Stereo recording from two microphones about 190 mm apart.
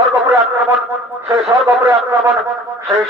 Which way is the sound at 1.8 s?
15° right (ahead or behind).